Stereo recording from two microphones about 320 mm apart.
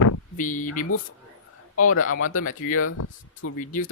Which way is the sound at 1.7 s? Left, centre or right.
Left.